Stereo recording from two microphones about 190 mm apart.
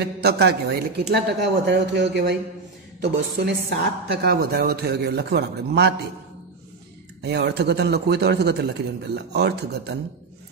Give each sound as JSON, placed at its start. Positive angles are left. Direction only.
{"t": 0.2, "sound": "speech", "side_deg": -55}
{"t": 7.2, "sound": "speech", "side_deg": -60}